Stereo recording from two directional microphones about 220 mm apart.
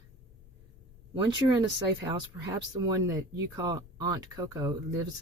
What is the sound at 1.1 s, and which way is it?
Speech, 20° right (ahead or behind).